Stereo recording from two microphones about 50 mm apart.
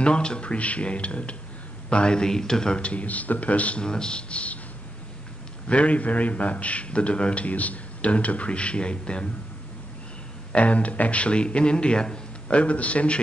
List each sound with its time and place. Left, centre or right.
0.0 s a man's voice: centre
3.8 s a man's voice: centre
5.7 s a man's voice: left
10.5 s a man's voice: left